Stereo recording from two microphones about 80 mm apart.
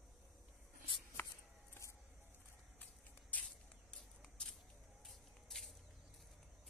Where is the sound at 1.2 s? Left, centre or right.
Left.